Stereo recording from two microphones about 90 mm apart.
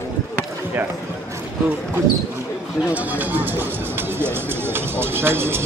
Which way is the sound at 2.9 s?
20° right (ahead or behind).